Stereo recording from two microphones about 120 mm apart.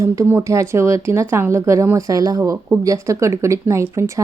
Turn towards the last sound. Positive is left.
turn(degrees=-25)  # may be behind; listen again after turning